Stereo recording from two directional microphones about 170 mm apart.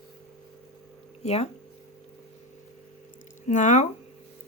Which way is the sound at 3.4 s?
45° left (ahead or behind).